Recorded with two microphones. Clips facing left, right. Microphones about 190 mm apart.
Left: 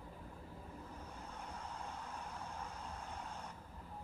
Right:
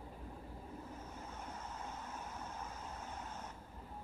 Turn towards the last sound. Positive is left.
turn(degrees=-5)  # may be behind; listen again after turning